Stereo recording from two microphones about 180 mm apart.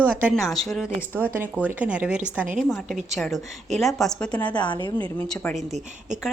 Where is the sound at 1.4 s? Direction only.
10° right (ahead or behind); by 4.6 s 5° left (ahead or behind).